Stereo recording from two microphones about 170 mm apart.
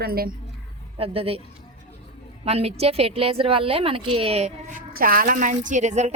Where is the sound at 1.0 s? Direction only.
35° right (ahead or behind).